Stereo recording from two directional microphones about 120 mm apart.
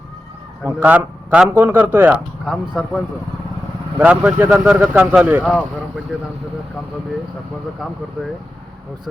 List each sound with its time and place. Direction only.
0.6 s a man's voice: 15° right (ahead or behind)
2.5 s speech: centre (ahead or behind)
3.9 s a man's voice: 10° right (ahead or behind)